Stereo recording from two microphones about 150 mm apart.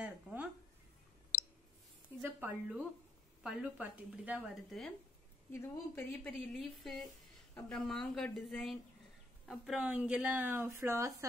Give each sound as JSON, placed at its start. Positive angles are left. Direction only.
{"t": 0.0, "sound": "a sound", "side_deg": -10}
{"t": 2.2, "sound": "a woman's voice", "side_deg": -10}
{"t": 5.5, "sound": "a woman's voice", "side_deg": 15}
{"t": 6.5, "sound": "a woman's voice", "side_deg": 0}